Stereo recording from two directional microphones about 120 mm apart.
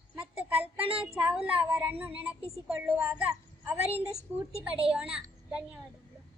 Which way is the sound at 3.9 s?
60° right (ahead or behind).